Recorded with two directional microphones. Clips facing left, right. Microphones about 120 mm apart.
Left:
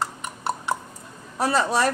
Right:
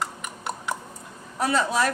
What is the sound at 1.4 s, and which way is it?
Speech, 35° left (ahead or behind).